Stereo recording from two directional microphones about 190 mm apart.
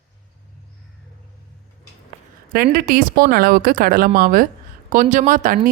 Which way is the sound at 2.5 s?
50° right (ahead or behind).